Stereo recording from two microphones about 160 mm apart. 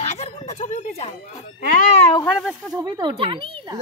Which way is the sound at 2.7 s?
25° right (ahead or behind).